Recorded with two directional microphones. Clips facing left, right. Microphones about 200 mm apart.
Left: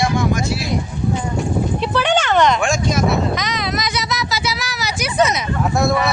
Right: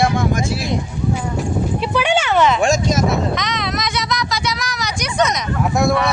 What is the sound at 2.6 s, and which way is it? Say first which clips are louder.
Speech: right 2 dB; 40° right (ahead or behind).